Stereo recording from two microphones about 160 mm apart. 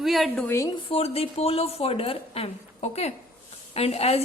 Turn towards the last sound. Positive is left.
turn(degrees=40)  # may be behind; listen again after turning